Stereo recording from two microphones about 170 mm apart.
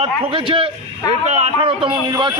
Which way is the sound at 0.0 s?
30° right (ahead or behind).